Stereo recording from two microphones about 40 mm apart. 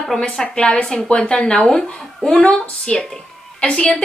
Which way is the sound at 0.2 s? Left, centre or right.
Left.